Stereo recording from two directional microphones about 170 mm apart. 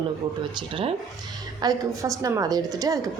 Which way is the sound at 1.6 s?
20° right (ahead or behind).